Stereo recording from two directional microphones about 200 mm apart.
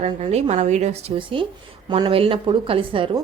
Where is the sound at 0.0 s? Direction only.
35° right (ahead or behind).